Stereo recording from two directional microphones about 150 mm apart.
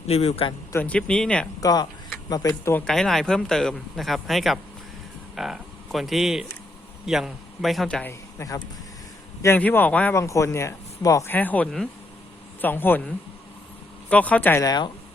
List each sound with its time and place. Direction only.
0.1 s speech: 40° left (ahead or behind)
0.7 s speech: 10° left (ahead or behind)
1.6 s speech: 25° left (ahead or behind)
2.8 s speech: 5° left (ahead or behind)
8.4 s speech: 25° left (ahead or behind)
14.6 s speech: 25° left (ahead or behind)